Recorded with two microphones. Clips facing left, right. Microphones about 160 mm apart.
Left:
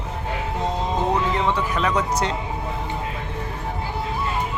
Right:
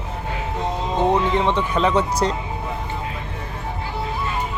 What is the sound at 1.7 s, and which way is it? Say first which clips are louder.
Speech: right 4 dB; 30° right (ahead or behind).